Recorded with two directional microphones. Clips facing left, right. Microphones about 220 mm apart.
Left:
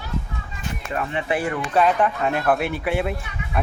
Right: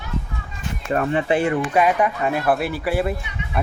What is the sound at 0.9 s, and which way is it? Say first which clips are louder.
Speech: right 7 dB; 45° right (ahead or behind).